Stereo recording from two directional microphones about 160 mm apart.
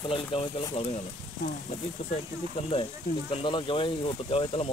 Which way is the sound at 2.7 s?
35° left (ahead or behind).